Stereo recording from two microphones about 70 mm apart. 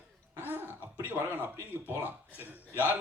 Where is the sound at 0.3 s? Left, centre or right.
Right.